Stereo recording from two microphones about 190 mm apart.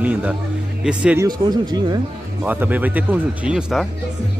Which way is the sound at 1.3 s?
20° right (ahead or behind).